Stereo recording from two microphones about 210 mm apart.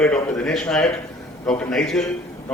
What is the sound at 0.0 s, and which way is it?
A man's voice, 5° left (ahead or behind).